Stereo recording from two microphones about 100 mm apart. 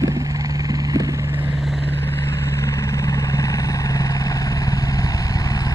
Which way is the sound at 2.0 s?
25° left (ahead or behind).